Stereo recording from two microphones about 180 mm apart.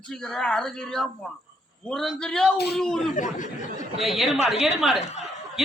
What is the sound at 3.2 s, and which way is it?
Speech, 45° left (ahead or behind).